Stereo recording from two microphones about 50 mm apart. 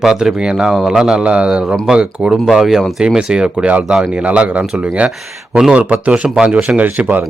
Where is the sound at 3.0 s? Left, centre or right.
Centre.